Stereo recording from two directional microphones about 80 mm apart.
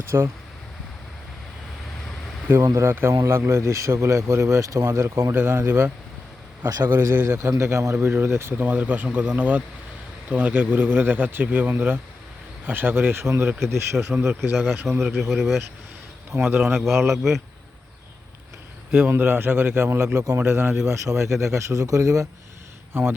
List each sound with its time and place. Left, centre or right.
0.1 s speech: right
2.5 s speech: right
6.7 s speech: right
6.9 s speech: right
7.3 s speech: right
8.5 s speech: centre
14.1 s speech: centre
14.5 s speech: centre
16.3 s speech: right
16.7 s speech: centre
19.0 s speech: right
22.9 s speech: right